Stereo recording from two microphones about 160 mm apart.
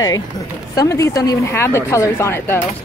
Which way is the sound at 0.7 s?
20° left (ahead or behind).